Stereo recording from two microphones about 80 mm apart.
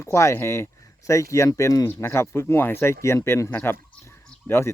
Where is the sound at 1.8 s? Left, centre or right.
Left.